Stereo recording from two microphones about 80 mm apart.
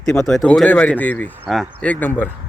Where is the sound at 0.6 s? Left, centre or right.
Left.